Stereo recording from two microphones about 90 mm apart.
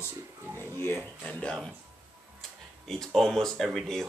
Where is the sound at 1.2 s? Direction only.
10° left (ahead or behind).